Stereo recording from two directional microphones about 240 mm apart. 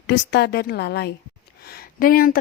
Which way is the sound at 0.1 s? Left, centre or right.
Left.